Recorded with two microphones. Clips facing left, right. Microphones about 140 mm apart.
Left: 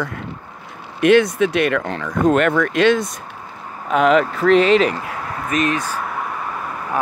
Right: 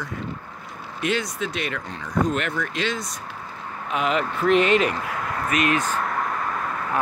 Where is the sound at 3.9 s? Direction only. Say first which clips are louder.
Left 9 dB; 45° left (ahead or behind).